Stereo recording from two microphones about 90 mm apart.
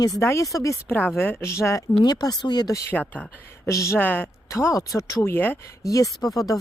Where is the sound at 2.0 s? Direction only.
45° left (ahead or behind).